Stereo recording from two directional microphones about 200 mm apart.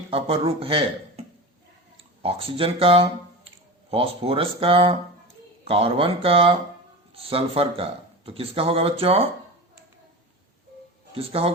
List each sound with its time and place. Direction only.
0.1 s speech: 30° right (ahead or behind)
2.2 s speech: 30° right (ahead or behind)
11.1 s speech: 30° right (ahead or behind)